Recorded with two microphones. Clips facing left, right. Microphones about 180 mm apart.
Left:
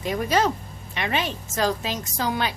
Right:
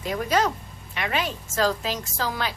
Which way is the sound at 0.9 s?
25° left (ahead or behind).